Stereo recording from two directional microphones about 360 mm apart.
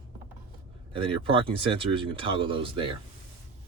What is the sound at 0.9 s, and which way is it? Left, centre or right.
Speech, centre.